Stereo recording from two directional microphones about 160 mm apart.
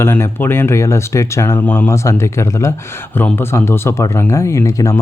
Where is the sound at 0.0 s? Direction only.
15° left (ahead or behind).